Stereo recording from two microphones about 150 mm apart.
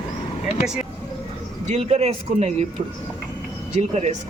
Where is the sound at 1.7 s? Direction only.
50° right (ahead or behind).